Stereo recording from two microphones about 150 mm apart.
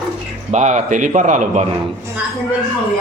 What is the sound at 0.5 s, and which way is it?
A man's voice, 50° right (ahead or behind).